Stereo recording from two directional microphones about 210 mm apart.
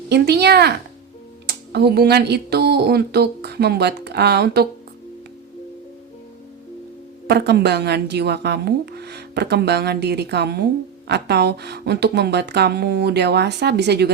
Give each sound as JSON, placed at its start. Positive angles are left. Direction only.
{"t": 0.1, "sound": "speech", "side_deg": -50}
{"t": 7.3, "sound": "speech", "side_deg": -50}